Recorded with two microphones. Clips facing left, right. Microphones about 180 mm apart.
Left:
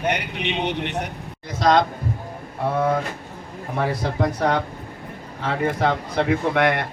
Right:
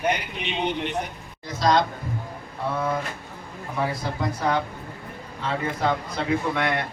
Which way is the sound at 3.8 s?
60° left (ahead or behind).